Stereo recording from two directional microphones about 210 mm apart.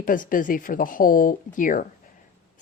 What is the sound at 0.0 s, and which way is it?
Speech, 40° left (ahead or behind).